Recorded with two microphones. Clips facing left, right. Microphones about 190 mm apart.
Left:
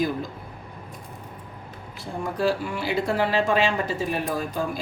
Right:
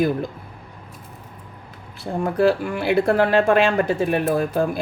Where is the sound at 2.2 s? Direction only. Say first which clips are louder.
Right 6 dB; 60° right (ahead or behind).